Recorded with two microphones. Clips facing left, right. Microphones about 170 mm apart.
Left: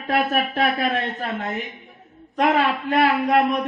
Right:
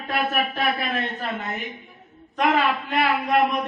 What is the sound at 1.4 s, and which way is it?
Speech, centre (ahead or behind).